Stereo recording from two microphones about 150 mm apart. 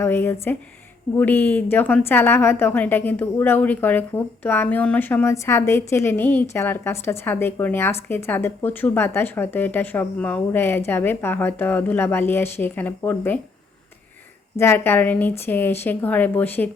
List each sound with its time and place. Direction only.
0.0 s a woman's voice: 15° left (ahead or behind)
14.6 s a woman's voice: 15° left (ahead or behind)